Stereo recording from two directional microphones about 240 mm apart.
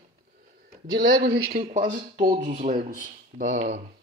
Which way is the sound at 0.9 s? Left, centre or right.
Right.